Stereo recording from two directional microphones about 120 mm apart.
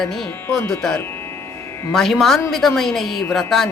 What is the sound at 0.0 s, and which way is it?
Speech, 5° left (ahead or behind).